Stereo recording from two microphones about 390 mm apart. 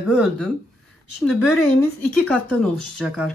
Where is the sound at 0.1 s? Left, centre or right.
Centre.